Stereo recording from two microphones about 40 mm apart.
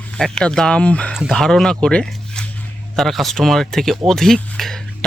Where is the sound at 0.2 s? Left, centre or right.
Centre.